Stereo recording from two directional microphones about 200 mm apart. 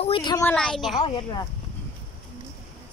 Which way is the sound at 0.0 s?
25° left (ahead or behind).